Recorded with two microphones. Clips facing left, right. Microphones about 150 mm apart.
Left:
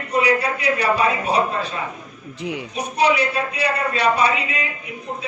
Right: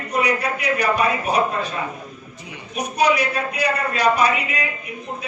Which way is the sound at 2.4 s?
80° left.